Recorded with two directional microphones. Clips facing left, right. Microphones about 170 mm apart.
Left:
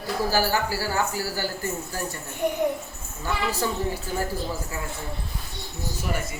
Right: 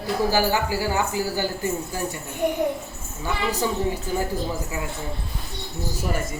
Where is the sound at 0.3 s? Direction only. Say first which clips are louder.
Right 1 dB; 15° right (ahead or behind).